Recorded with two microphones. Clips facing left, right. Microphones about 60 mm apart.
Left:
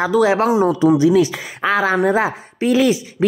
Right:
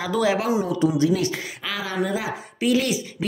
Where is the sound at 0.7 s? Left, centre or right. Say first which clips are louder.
Left 7 dB; left.